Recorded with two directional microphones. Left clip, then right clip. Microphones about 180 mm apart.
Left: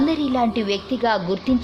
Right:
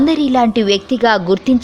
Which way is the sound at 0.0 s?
35° right (ahead or behind).